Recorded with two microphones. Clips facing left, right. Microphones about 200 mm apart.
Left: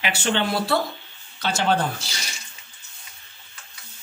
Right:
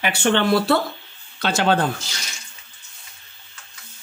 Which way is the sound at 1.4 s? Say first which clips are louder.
Right 3 dB; 75° right (ahead or behind).